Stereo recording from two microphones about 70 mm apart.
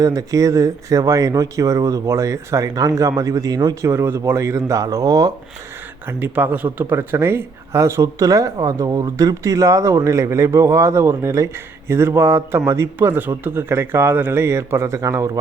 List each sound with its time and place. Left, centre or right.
0.0 s speech: right
3.8 s speech: right
6.1 s a man's voice: right
8.2 s a man's voice: right